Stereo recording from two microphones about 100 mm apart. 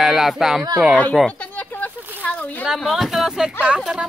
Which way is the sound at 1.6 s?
15° left (ahead or behind).